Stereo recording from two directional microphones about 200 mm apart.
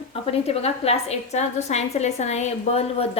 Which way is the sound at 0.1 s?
30° left (ahead or behind).